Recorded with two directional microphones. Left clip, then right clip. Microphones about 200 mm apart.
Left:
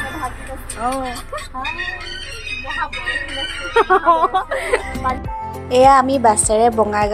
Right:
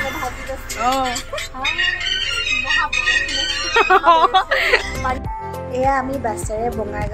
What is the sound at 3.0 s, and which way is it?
Music, 30° left (ahead or behind).